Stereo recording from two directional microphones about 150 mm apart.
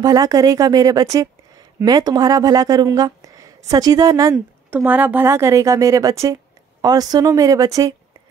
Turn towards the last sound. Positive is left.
turn(degrees=-25)  # may be behind; listen again after turning